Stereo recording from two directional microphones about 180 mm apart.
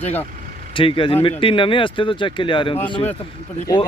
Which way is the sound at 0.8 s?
30° left (ahead or behind).